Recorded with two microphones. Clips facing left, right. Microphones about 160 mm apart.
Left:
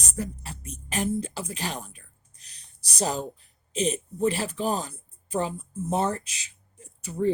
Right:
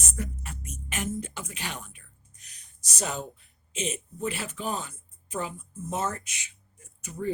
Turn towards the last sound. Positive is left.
turn(degrees=30)  # may be behind; listen again after turning